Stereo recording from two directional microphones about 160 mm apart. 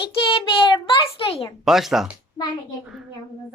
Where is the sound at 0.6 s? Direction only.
30° left (ahead or behind).